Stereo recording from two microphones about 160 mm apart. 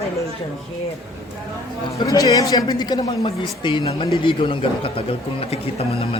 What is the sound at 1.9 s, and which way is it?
A man's voice, 20° left (ahead or behind).